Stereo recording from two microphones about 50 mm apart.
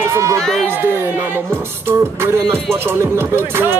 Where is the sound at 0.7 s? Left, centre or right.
Right.